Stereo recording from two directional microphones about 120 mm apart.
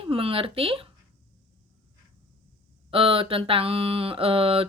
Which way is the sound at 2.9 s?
50° right (ahead or behind).